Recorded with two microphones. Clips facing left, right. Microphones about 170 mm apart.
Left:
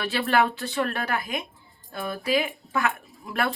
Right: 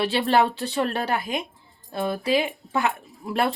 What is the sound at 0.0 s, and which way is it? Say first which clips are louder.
A woman's voice: right 3 dB; 30° right (ahead or behind).